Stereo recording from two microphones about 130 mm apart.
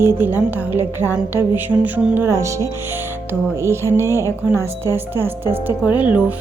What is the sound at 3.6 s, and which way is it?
A woman's voice, 20° right (ahead or behind).